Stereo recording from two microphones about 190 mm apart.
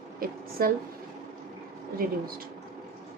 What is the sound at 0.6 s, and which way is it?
Speech, 50° right (ahead or behind).